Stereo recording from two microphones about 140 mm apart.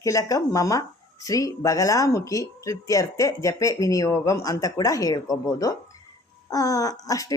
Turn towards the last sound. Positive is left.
turn(degrees=25)  # may be behind; listen again after turning